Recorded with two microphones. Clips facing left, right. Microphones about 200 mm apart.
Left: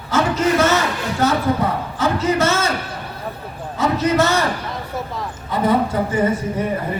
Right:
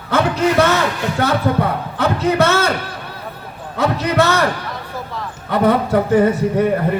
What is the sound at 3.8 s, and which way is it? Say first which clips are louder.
Speech: right 1 dB; 60° right (ahead or behind).